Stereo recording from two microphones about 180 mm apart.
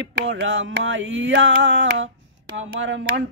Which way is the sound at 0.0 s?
90° right.